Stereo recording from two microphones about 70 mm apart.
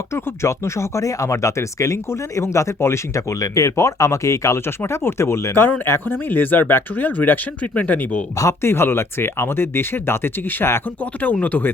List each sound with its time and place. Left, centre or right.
0.1 s speech: left
5.8 s speech: left
8.4 s speech: left
11.0 s speech: left